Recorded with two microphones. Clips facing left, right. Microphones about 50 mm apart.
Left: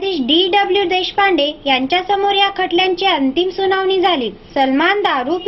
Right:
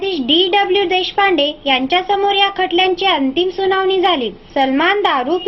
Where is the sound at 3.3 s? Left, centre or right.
Centre.